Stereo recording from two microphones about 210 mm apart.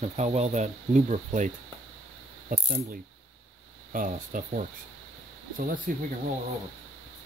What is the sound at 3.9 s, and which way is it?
Speech, 40° right (ahead or behind).